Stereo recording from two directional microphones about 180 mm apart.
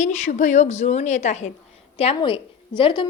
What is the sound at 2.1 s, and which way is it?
Speech, 30° left (ahead or behind).